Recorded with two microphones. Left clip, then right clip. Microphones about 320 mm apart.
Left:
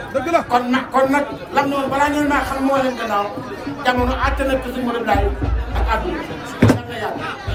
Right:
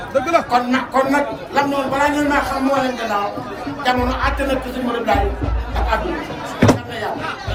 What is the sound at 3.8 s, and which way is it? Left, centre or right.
Speech, centre.